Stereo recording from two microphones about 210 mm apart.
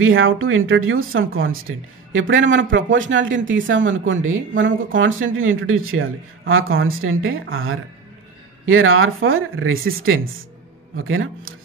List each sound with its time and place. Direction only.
0.0 s speech: 70° right (ahead or behind)